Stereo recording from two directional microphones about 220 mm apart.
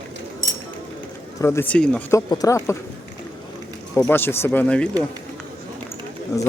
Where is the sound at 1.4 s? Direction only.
10° left (ahead or behind).